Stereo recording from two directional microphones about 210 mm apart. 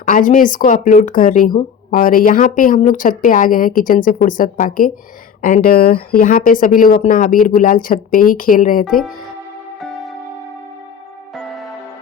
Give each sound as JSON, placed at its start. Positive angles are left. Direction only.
{"t": 0.0, "sound": "a woman's voice", "side_deg": 40}